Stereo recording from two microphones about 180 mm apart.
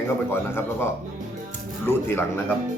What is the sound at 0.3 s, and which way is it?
Speech, 15° left (ahead or behind).